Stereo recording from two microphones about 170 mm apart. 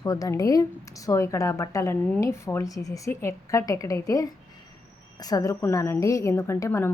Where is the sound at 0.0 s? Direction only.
20° left (ahead or behind).